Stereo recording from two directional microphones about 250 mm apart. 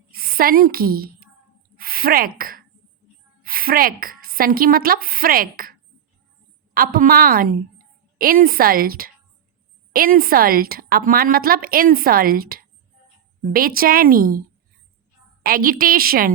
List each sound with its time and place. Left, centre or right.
0.2 s a woman's voice: right
1.7 s a sound: right
3.4 s speech: right
6.7 s a woman's voice: right
15.4 s a woman's voice: right